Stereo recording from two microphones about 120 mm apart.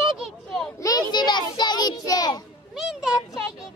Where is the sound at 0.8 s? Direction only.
35° left (ahead or behind).